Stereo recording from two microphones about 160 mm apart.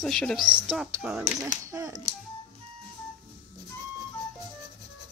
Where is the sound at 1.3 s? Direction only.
20° right (ahead or behind).